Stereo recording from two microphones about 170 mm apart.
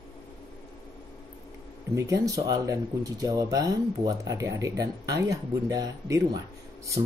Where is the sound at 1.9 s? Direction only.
20° right (ahead or behind).